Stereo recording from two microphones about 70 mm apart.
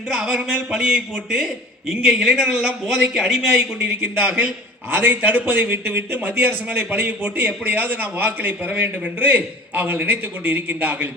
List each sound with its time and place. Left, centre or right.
0.1 s a man's voice: centre
3.8 s a man's voice: right